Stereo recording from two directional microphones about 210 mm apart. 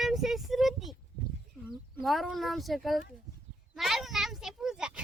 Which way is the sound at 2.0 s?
Centre (ahead or behind).